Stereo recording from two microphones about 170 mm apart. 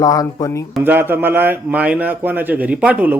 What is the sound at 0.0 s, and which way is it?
Speech, 20° left (ahead or behind).